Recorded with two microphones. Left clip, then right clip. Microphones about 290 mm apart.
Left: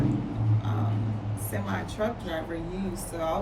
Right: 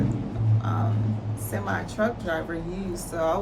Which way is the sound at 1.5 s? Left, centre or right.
Centre.